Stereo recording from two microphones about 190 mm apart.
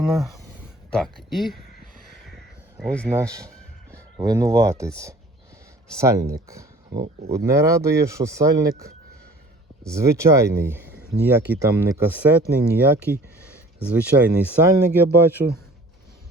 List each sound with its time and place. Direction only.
0.0 s speech: centre (ahead or behind)
2.7 s speech: 5° left (ahead or behind)
3.1 s speech: 15° right (ahead or behind)
6.0 s speech: 15° right (ahead or behind)
6.9 s speech: 60° right (ahead or behind)
7.3 s speech: 15° right (ahead or behind)
9.9 s speech: 15° right (ahead or behind)
10.8 s a sound: 55° right (ahead or behind)
11.3 s speech: 10° right (ahead or behind)